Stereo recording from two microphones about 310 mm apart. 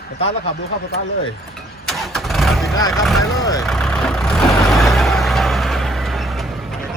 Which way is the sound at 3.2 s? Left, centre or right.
Centre.